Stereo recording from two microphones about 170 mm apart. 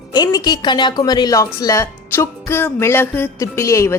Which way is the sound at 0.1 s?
25° left (ahead or behind).